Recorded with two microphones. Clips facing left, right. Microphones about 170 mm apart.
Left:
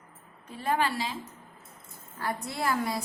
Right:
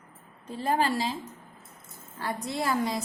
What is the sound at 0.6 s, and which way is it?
Speech, 35° right (ahead or behind).